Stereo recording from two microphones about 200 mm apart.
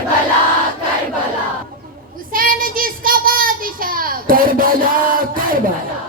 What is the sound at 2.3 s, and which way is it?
Child singing, 45° right (ahead or behind).